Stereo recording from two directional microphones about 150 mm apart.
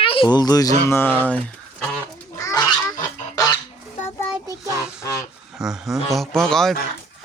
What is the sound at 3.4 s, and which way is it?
Goose, 25° left (ahead or behind).